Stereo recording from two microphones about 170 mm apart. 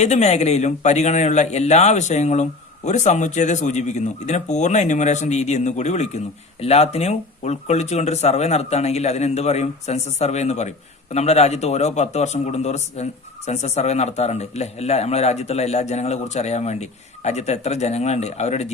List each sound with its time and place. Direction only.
0.0 s speech: 40° left (ahead or behind)